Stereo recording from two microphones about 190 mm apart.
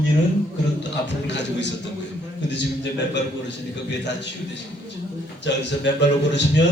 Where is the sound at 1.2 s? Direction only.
70° left (ahead or behind).